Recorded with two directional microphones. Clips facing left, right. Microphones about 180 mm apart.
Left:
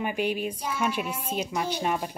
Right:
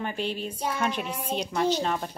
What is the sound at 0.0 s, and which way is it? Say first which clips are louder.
Speech: left 3 dB; 10° left (ahead or behind).